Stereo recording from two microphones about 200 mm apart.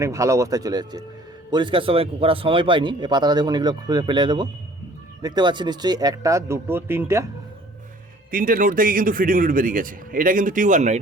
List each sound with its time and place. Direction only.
0.0 s a man's voice: 15° right (ahead or behind)
8.3 s speech: 45° right (ahead or behind)